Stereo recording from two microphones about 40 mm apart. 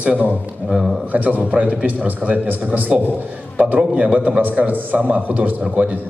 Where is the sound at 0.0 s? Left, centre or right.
Right.